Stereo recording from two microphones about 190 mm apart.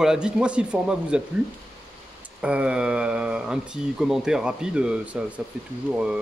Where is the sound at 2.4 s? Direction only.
5° right (ahead or behind).